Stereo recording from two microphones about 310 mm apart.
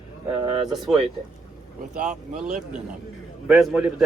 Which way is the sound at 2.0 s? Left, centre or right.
Right.